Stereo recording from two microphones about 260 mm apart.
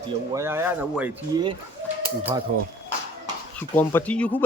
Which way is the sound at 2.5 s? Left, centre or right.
Right.